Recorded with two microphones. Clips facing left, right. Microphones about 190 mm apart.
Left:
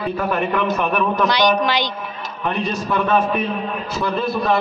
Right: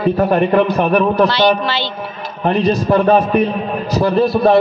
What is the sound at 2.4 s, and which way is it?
A man's voice, 35° right (ahead or behind).